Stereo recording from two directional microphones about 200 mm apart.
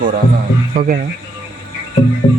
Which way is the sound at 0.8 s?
45° right (ahead or behind).